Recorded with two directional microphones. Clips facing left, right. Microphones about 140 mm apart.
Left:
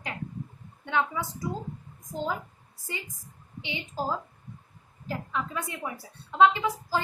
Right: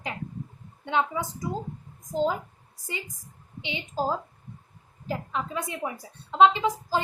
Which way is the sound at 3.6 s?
20° right (ahead or behind).